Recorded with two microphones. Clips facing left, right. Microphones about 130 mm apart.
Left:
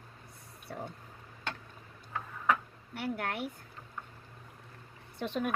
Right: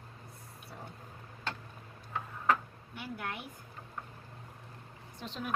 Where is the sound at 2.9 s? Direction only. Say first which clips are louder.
Left 5 dB; 65° left (ahead or behind).